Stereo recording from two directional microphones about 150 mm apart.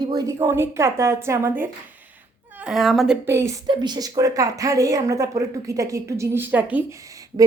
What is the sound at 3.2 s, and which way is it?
Speech, 15° right (ahead or behind).